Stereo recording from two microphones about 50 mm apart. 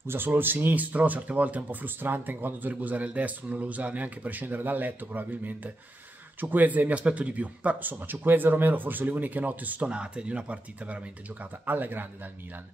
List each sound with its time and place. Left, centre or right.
0.0 s speech: right
2.7 s speech: right
9.8 s speech: right
11.6 s speech: right